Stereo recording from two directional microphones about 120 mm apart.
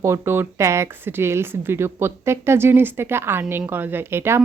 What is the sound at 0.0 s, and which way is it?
Speech, 20° right (ahead or behind).